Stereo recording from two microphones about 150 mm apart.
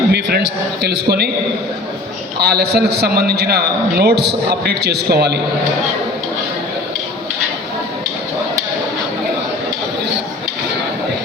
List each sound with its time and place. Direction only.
0.1 s a man's voice: 90° right
2.4 s a man's voice: 90° right